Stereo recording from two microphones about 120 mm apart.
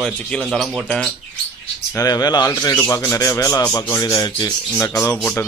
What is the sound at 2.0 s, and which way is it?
Speech, 35° left (ahead or behind).